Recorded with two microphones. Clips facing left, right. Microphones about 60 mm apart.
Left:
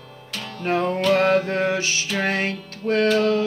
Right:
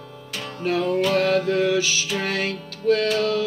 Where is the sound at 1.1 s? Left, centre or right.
Left.